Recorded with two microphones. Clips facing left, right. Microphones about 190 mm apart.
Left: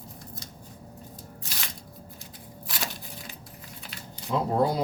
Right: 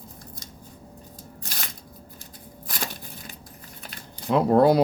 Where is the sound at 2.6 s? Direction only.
50° right (ahead or behind).